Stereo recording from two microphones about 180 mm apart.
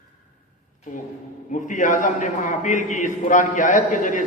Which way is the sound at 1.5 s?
45° left (ahead or behind).